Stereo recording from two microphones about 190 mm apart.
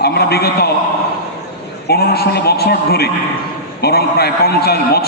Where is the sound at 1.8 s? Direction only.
55° left (ahead or behind).